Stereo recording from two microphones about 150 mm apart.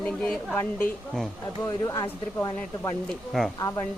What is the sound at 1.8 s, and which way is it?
Speech, 25° left (ahead or behind).